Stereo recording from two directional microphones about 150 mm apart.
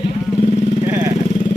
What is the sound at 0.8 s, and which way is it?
Vehicle, 20° right (ahead or behind).